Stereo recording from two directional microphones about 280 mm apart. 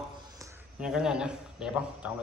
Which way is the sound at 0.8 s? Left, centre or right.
Centre.